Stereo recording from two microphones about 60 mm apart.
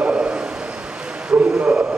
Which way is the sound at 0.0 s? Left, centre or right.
Centre.